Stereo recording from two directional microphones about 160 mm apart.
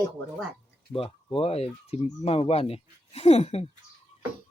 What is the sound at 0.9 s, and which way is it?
Speech, 35° left (ahead or behind).